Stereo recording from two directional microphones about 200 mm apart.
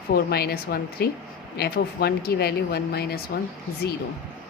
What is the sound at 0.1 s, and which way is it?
Speech, 50° left (ahead or behind).